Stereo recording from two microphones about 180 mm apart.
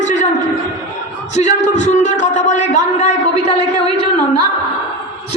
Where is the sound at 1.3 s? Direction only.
40° left (ahead or behind).